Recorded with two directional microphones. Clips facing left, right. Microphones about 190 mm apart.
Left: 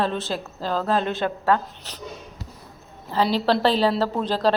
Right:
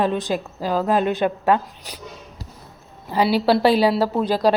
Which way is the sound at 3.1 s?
10° right (ahead or behind).